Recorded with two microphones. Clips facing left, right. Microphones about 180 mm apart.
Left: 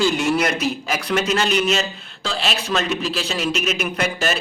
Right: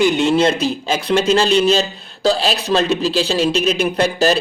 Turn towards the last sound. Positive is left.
turn(degrees=-35)  # may be behind; listen again after turning